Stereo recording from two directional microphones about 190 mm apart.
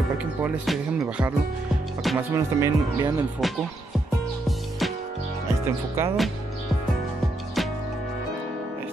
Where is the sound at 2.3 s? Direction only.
15° right (ahead or behind).